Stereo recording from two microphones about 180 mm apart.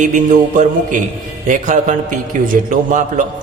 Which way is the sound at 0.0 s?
45° right (ahead or behind).